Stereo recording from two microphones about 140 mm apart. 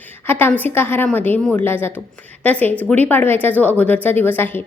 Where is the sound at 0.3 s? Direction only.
15° left (ahead or behind).